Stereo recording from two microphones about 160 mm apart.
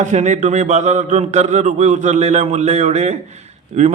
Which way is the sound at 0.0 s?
45° right (ahead or behind).